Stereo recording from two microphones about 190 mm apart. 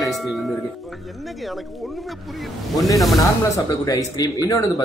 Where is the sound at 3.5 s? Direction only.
20° left (ahead or behind).